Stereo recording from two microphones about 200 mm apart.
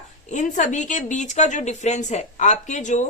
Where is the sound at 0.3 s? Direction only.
40° left (ahead or behind).